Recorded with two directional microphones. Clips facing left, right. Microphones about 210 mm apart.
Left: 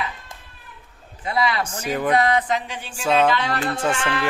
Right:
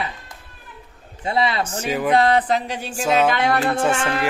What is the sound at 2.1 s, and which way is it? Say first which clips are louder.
Music: right 4 dB; 30° right (ahead or behind).